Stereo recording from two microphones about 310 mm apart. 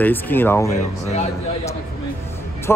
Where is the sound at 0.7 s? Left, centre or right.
Left.